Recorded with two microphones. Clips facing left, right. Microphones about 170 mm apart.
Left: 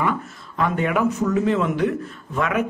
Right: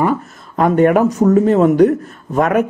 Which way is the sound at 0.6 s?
45° right (ahead or behind).